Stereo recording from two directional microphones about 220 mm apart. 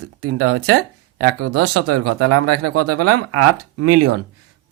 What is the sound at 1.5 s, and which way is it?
Speech, 90° right.